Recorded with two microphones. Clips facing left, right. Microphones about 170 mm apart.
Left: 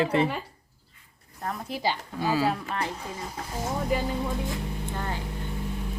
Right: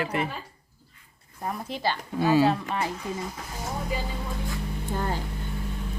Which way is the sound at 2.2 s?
25° right (ahead or behind).